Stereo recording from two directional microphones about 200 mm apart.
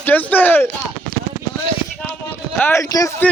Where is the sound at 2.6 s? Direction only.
15° left (ahead or behind).